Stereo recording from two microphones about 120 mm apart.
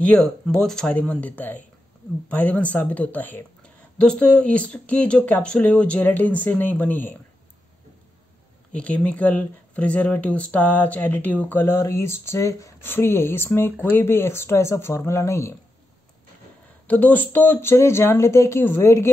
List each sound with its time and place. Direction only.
0.0 s speech: 10° left (ahead or behind)
8.7 s speech: 10° left (ahead or behind)
16.8 s speech: 15° left (ahead or behind)